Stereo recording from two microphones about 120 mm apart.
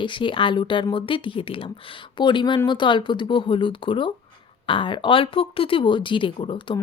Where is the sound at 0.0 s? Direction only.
45° left (ahead or behind).